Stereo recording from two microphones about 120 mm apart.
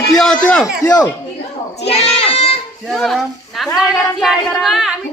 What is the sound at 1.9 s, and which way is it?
Child singing, 55° left (ahead or behind).